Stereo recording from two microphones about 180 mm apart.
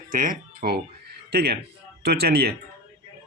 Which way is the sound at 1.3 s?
60° right (ahead or behind).